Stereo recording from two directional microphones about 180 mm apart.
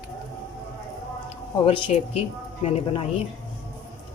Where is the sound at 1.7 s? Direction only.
35° left (ahead or behind).